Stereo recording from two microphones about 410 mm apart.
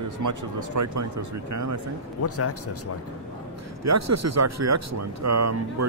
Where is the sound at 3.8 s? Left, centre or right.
Right.